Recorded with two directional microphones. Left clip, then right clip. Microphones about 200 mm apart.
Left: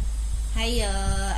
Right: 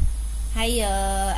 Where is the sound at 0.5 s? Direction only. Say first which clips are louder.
Right 4 dB; 30° right (ahead or behind).